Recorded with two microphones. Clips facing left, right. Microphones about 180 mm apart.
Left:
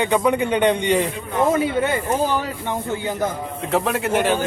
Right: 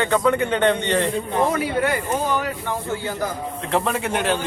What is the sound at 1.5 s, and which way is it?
Speech, 25° left (ahead or behind).